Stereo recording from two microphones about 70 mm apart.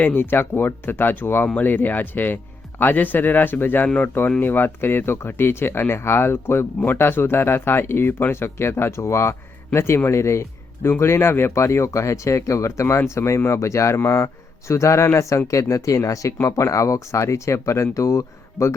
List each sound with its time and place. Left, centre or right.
0.0 s speech: left